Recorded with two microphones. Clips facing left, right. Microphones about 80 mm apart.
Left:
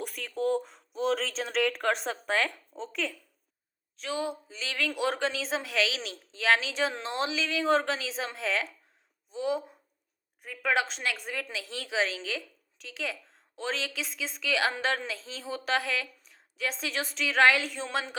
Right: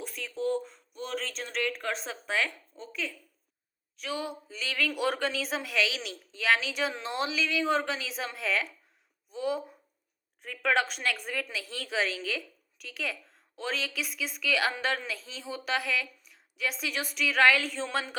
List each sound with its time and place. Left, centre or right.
0.0 s speech: left
2.7 s speech: left
3.9 s a woman's voice: left
10.4 s a woman's voice: centre